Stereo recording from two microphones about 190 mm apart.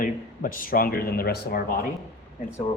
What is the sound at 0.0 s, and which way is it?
Speech, 45° left (ahead or behind).